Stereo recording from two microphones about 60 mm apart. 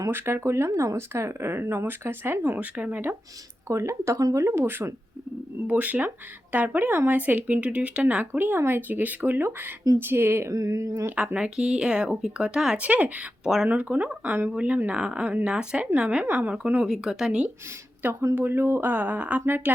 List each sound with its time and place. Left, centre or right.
0.1 s speech: right
0.7 s speech: right
0.9 s speech: right
3.7 s speech: right
4.6 s speech: right
5.6 s speech: right
10.5 s speech: right
11.3 s speech: centre
12.8 s speech: right
16.8 s speech: centre
18.0 s speech: right